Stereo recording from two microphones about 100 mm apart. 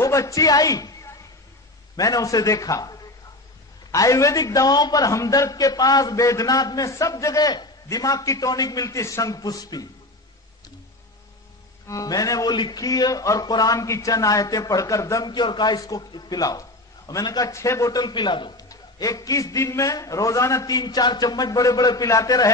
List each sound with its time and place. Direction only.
0.0 s a man's voice: 30° left (ahead or behind)
11.9 s a man's voice: 35° left (ahead or behind)
15.2 s a man's voice: 50° left (ahead or behind)
18.7 s a man's voice: 35° left (ahead or behind)